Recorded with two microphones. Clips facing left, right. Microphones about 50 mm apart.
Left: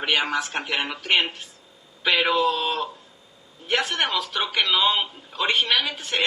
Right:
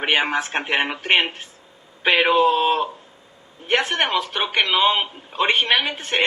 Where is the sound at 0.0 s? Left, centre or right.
Right.